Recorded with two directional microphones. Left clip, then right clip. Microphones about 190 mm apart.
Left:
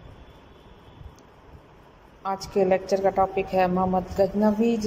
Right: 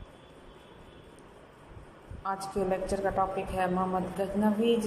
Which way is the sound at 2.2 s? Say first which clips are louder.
Left 8 dB; 15° left (ahead or behind).